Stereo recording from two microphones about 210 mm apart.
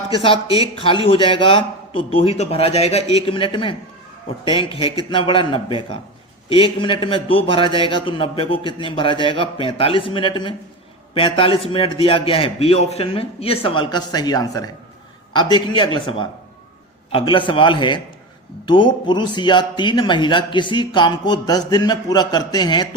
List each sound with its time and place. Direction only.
0.1 s speech: 25° left (ahead or behind)